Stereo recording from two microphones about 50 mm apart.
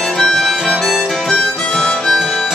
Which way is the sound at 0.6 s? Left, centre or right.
Centre.